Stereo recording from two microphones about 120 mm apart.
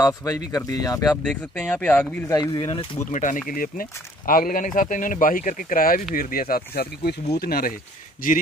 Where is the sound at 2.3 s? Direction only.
30° left (ahead or behind).